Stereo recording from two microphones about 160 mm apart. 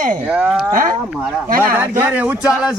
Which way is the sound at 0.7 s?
60° right (ahead or behind).